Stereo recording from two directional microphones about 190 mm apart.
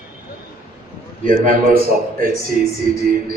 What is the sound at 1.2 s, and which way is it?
Speech, 45° right (ahead or behind).